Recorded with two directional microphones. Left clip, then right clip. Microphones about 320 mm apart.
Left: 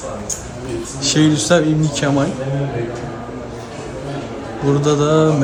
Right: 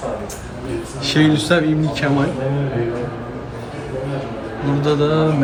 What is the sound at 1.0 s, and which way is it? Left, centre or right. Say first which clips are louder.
A man's voice: left 1 dB; centre.